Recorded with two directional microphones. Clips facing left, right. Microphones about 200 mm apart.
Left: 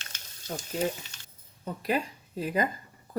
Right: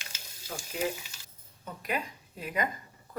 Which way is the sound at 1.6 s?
35° left (ahead or behind).